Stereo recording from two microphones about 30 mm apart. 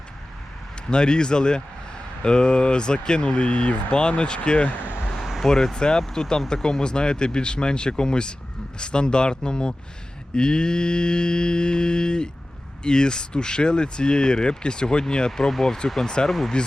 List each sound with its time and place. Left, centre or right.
0.9 s speech: left
4.2 s speech: left
5.1 s vehicle: centre
5.5 s speech: centre
15.4 s speech: centre; by 16.7 s left